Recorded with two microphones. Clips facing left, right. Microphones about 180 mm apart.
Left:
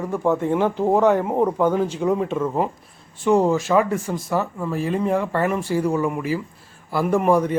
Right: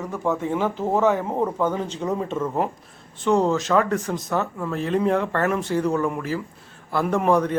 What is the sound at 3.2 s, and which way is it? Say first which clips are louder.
Speech: left 2 dB; 15° left (ahead or behind).